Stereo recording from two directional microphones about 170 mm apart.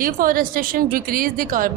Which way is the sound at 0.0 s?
55° right (ahead or behind).